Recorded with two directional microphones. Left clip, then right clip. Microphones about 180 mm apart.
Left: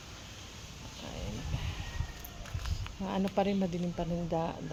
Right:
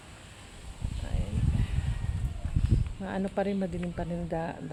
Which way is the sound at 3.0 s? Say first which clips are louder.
Even; 20° right (ahead or behind).